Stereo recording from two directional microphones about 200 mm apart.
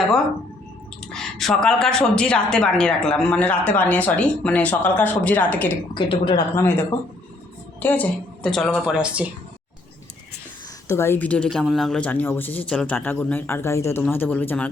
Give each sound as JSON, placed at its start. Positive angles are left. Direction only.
{"t": 1.1, "sound": "speech", "side_deg": 0}
{"t": 5.9, "sound": "speech", "side_deg": 25}
{"t": 6.6, "sound": "speech", "side_deg": 10}
{"t": 10.8, "sound": "speech", "side_deg": 10}